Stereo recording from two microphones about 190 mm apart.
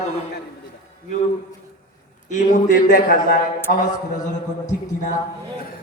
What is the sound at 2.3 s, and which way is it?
A man's voice, 45° left (ahead or behind).